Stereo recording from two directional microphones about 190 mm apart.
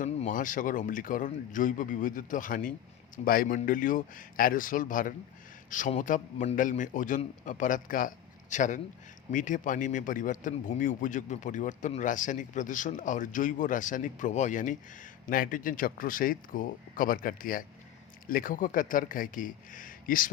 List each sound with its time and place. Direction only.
0.0 s a man's voice: 40° left (ahead or behind)